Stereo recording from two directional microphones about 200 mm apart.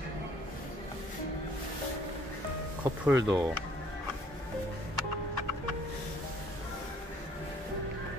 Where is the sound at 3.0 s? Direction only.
15° right (ahead or behind).